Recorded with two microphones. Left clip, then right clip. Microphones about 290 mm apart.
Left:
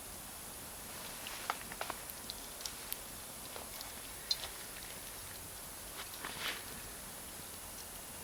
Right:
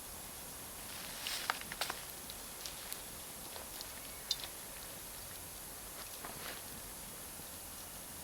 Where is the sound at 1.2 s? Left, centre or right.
Right.